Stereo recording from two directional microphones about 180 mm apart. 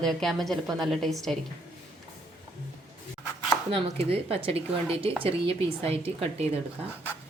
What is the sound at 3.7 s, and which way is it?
Speech, 35° right (ahead or behind).